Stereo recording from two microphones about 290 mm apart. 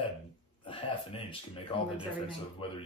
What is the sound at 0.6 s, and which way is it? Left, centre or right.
Speech, centre.